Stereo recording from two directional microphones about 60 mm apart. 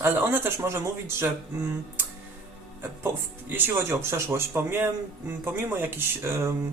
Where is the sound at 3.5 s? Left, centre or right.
Right.